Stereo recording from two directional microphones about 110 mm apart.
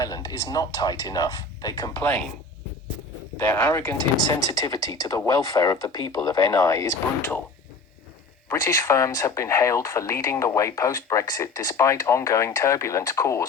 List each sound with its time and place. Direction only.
0.0 s speech: 35° left (ahead or behind)
2.0 s speech: 10° left (ahead or behind)
3.3 s speech: 25° left (ahead or behind)
8.5 s speech: 30° left (ahead or behind)